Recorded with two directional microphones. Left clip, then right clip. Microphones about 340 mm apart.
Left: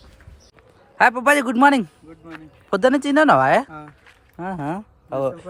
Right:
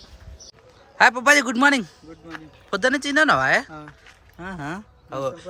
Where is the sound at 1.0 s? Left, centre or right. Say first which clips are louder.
Even; centre.